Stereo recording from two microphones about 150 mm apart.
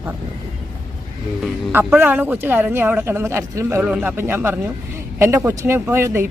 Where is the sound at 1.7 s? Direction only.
5° right (ahead or behind).